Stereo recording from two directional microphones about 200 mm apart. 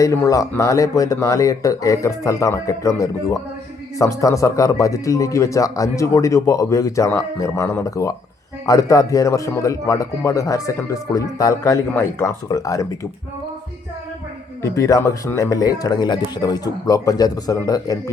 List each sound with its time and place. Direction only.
0.0 s speech: 15° left (ahead or behind)
14.6 s speech: 15° left (ahead or behind)